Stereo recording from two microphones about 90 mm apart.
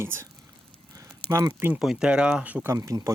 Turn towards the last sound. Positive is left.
turn(degrees=-40)  # may be behind; listen again after turning